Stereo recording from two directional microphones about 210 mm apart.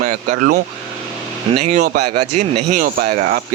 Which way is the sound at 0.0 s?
35° right (ahead or behind).